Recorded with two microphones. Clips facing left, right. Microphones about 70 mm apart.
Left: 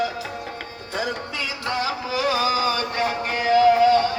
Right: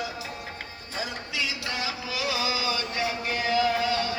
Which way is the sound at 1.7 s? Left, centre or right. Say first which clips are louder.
Left 7 dB; left.